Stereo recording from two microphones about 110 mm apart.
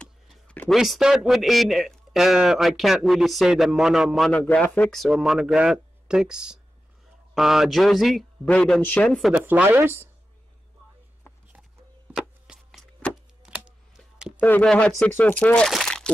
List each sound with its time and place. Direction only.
0.0 s a sound: 10° left (ahead or behind)
0.7 s a man's voice: centre (ahead or behind)
4.3 s speech: 10° left (ahead or behind)
4.9 s a man's voice: centre (ahead or behind)
9.3 s speech: 15° right (ahead or behind)
12.2 s a sound: centre (ahead or behind)
14.4 s speech: 10° left (ahead or behind)
15.7 s crumpling: 5° left (ahead or behind)